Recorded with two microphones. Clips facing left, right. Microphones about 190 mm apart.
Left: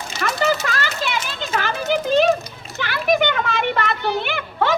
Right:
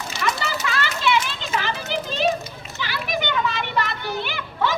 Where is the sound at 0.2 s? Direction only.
45° left (ahead or behind).